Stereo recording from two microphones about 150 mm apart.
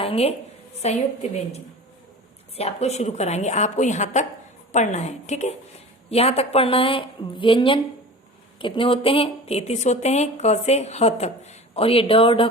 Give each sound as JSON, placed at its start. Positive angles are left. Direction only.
{"t": 0.0, "sound": "a woman's voice", "side_deg": 40}
{"t": 2.6, "sound": "a woman's voice", "side_deg": 45}